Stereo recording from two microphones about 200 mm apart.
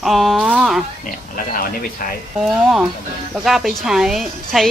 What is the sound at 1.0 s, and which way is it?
Speech, 45° left (ahead or behind).